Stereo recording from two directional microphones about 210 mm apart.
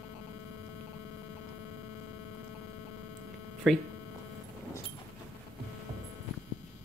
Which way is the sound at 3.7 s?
Centre (ahead or behind).